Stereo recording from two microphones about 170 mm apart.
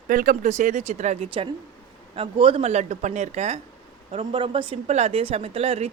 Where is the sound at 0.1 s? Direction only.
50° right (ahead or behind).